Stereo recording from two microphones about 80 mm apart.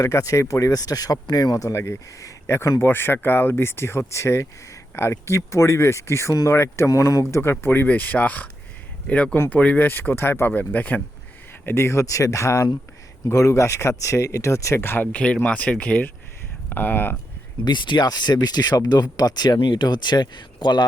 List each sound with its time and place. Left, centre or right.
0.0 s speech: left; by 9.7 s centre
9.7 s speech: left
11.6 s speech: left
17.7 s speech: left
19.6 s speech: left